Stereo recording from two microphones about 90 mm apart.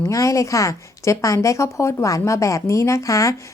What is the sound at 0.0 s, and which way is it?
Speech, 35° left (ahead or behind).